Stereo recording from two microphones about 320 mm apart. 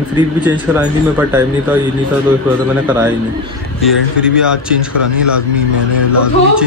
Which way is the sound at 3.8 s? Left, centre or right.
Centre.